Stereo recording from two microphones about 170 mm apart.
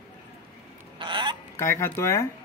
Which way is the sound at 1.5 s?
15° left (ahead or behind).